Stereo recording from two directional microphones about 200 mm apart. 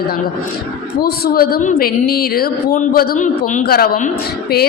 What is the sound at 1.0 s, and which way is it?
A woman's voice, 50° left (ahead or behind).